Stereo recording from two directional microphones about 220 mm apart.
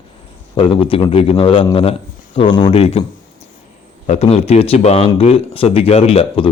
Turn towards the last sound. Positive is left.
turn(degrees=25)  # may be behind; listen again after turning